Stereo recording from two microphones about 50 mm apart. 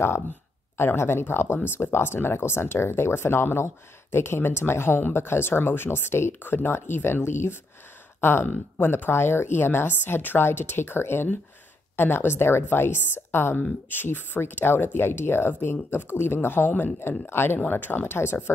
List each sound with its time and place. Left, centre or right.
0.7 s speech: left
8.2 s speech: left
17.3 s speech: left
17.6 s speech: left